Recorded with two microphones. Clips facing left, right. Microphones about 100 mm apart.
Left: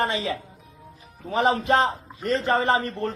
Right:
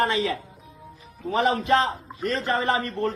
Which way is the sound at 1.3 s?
25° left (ahead or behind).